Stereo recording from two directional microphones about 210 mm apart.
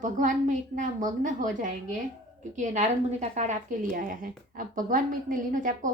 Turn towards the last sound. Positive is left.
turn(degrees=-40)  # may be behind; listen again after turning